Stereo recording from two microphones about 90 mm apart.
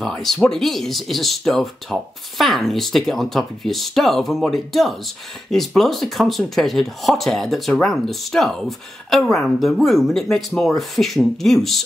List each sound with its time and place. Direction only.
0.0 s speech: 5° left (ahead or behind)